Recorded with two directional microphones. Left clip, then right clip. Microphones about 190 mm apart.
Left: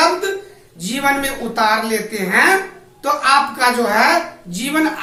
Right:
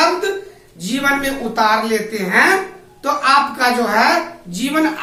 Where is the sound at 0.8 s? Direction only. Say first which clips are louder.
Even; 5° left (ahead or behind).